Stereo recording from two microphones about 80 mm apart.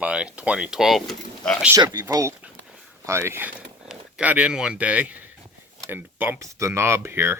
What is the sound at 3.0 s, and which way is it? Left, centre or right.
Speech, right.